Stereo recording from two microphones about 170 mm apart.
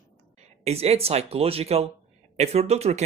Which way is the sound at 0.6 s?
40° right (ahead or behind).